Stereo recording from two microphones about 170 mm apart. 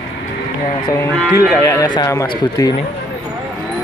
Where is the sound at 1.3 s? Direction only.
20° left (ahead or behind).